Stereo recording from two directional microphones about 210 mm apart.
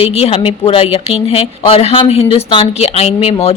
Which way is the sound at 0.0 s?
30° left (ahead or behind).